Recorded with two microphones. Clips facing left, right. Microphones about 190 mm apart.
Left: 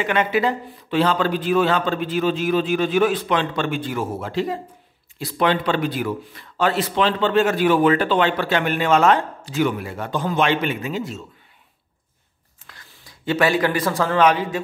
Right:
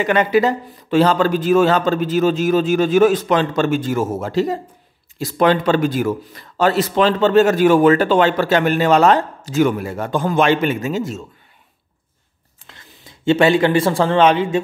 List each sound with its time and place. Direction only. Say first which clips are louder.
0.0 s speech: right 5 dB; 40° right (ahead or behind)
12.6 s a man's voice: right 4 dB; 25° right (ahead or behind)